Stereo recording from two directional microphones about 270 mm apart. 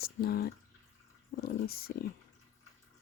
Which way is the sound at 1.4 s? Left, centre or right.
Left.